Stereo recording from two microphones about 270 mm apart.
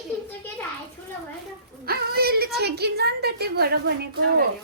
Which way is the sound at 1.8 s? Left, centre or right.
Right.